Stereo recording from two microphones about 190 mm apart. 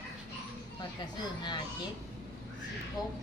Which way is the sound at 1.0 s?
25° left (ahead or behind).